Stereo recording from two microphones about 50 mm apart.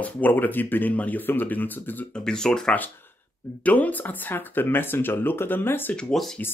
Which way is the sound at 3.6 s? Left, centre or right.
Left.